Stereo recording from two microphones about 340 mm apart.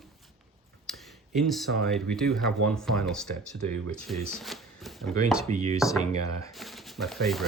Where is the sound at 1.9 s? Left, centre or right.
Centre.